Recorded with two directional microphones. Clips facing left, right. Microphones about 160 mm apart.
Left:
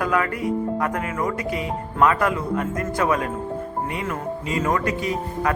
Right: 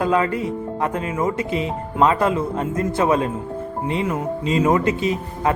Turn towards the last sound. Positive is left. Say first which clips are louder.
# right 2 dB
turn(degrees=-25)  # may be behind; listen again after turning